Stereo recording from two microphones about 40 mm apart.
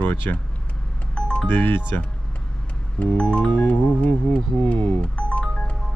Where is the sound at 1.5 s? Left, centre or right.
Left.